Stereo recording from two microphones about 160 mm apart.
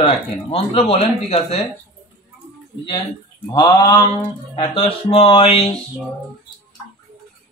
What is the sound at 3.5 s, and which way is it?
Speech, 25° left (ahead or behind).